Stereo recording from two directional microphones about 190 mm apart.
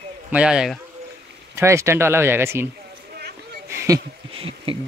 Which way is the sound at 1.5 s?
15° right (ahead or behind).